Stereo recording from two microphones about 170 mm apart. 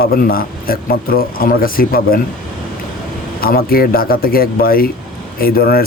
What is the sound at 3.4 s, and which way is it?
Speech, 60° left (ahead or behind).